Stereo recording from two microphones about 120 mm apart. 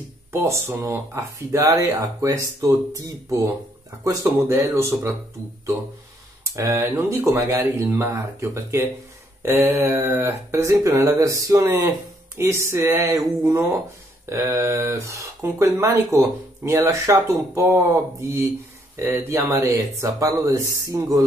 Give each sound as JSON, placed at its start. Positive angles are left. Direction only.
{"t": 0.3, "sound": "speech", "side_deg": -20}
{"t": 6.5, "sound": "speech", "side_deg": -25}